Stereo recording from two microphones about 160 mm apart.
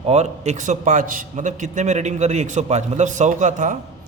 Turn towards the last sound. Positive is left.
turn(degrees=-50)  # may be behind; listen again after turning